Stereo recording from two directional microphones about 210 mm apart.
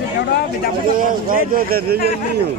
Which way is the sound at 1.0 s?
40° right (ahead or behind).